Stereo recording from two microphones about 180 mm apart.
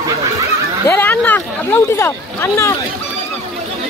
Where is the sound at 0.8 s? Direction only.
10° left (ahead or behind).